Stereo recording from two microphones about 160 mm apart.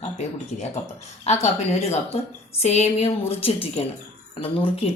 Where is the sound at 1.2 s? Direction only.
45° left (ahead or behind).